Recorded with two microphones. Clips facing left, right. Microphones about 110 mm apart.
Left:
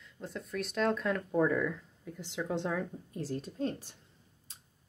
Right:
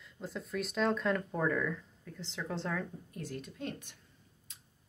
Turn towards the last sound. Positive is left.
turn(degrees=35)  # may be behind; listen again after turning